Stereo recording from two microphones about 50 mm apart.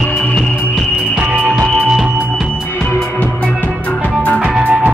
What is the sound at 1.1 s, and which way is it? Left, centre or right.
Music, right.